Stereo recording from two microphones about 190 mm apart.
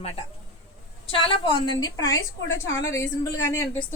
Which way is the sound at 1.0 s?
30° left (ahead or behind).